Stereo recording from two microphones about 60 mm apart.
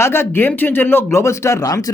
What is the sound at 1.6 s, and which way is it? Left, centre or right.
Speech, left.